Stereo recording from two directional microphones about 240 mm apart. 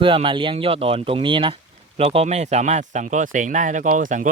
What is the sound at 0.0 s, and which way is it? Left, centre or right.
Speech, right.